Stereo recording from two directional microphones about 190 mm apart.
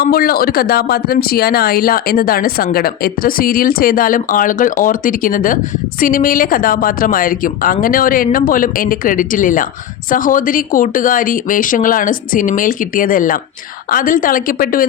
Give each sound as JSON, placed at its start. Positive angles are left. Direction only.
{"t": 0.0, "sound": "speech", "side_deg": 50}